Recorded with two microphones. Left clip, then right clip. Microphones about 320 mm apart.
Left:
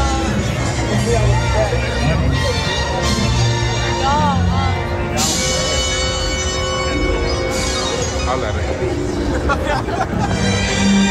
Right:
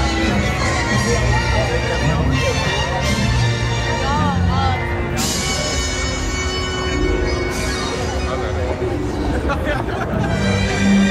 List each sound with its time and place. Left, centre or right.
10.4 s music: left